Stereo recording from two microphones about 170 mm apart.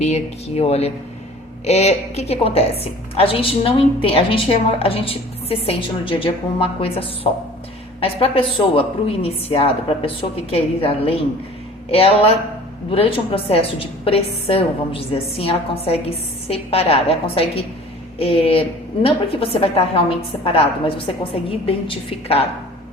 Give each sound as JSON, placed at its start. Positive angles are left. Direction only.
{"t": 0.0, "sound": "a woman's voice", "side_deg": 40}